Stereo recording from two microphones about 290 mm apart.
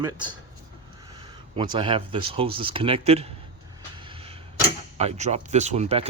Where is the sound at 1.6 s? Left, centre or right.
Centre.